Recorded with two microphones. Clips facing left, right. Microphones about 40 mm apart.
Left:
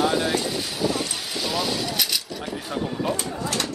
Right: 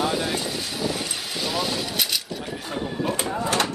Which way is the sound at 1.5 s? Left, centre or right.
Centre.